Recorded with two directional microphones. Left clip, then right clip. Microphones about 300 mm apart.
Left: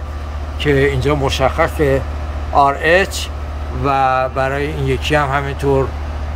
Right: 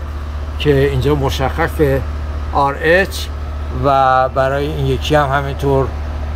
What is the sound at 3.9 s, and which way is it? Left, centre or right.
Mantra, centre.